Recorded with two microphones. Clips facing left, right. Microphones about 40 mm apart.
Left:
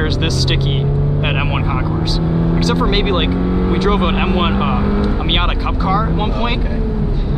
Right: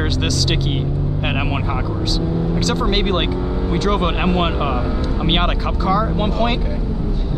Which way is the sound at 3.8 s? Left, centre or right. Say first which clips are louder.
Even; centre.